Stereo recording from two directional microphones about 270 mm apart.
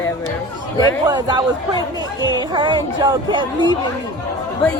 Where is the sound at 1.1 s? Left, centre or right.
Centre.